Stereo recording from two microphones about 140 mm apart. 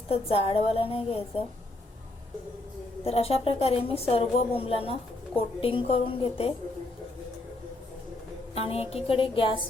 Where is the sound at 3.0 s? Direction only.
45° left (ahead or behind).